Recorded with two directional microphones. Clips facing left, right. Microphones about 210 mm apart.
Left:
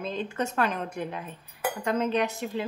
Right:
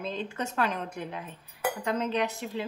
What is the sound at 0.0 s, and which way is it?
A woman's voice, 50° left (ahead or behind).